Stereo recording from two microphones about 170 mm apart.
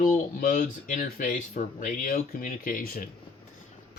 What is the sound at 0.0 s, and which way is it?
Speech, 50° left (ahead or behind).